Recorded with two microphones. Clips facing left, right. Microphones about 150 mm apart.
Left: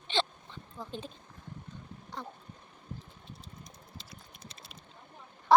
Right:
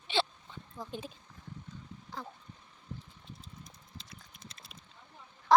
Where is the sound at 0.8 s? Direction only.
10° right (ahead or behind).